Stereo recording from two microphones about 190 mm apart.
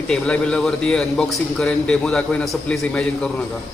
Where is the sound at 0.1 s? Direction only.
5° left (ahead or behind).